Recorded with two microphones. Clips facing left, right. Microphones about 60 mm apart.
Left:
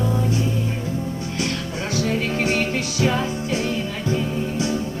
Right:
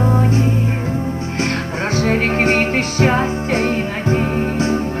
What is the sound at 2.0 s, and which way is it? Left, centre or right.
Music, right.